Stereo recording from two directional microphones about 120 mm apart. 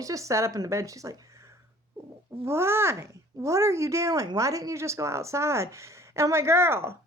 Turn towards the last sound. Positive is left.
turn(degrees=-20)  # may be behind; listen again after turning